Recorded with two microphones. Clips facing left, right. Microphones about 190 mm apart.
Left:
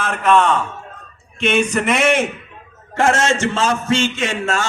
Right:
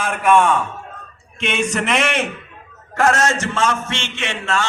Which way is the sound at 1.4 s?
5° left (ahead or behind).